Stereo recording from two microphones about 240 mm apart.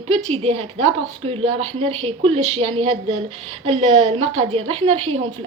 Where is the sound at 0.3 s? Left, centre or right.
Right.